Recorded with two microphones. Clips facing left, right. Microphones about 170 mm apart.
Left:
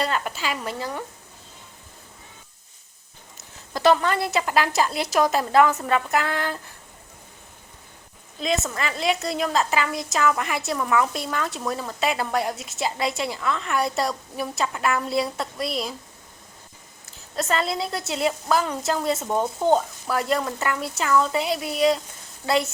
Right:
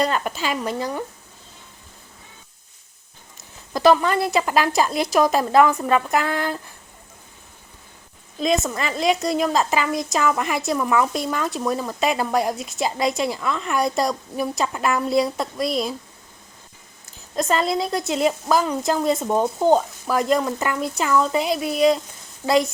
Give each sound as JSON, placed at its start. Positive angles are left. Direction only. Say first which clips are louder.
{"t": 0.0, "sound": "a woman's voice", "louder": "right 4 dB", "side_deg": -15}
{"t": 3.8, "sound": "a woman's voice", "louder": "right 3 dB", "side_deg": -15}
{"t": 8.4, "sound": "a woman's voice", "louder": "right 4 dB", "side_deg": -20}
{"t": 17.3, "sound": "a woman's voice", "louder": "right 4 dB", "side_deg": -15}